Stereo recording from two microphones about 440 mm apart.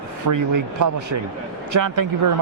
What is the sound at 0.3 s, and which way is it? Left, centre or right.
Speech, right.